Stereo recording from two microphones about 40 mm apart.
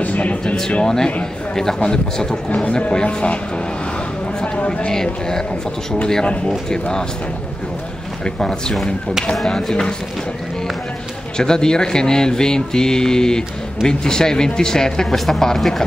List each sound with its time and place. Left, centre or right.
0.0 s a sound: left
0.8 s a man's voice: centre
2.5 s speech: left
4.6 s speech: left
4.9 s speech: centre
6.7 s speech: centre
8.4 s speech: centre
11.3 s speech: centre
15.1 s speech: centre